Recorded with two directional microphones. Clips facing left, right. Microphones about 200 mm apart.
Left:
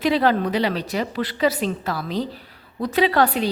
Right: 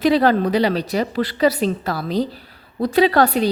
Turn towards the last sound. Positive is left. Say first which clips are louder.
# right 3 dB
turn(degrees=-40)  # may be behind; listen again after turning